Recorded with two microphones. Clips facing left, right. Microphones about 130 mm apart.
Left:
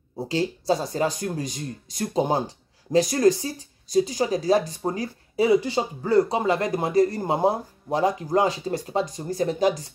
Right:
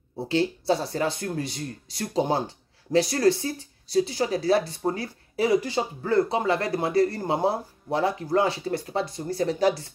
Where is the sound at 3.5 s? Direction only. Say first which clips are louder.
Left 2 dB; 45° left (ahead or behind).